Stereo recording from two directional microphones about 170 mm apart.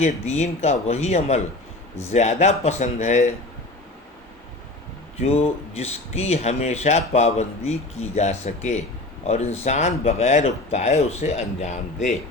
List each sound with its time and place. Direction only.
0.0 s speech: 40° left (ahead or behind)
5.2 s speech: 40° left (ahead or behind)